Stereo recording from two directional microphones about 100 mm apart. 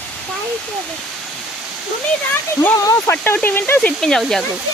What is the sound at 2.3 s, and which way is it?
Speech, 25° left (ahead or behind).